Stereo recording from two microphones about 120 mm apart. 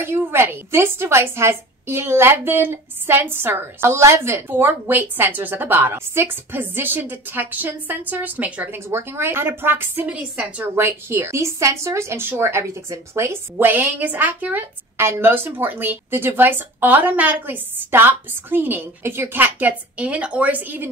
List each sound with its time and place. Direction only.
0.0 s a woman's voice: 20° right (ahead or behind)